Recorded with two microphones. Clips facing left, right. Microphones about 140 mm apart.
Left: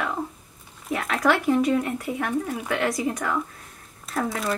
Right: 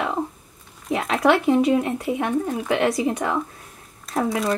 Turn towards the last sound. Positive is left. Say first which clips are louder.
# right 4 dB
turn(degrees=-25)  # may be behind; listen again after turning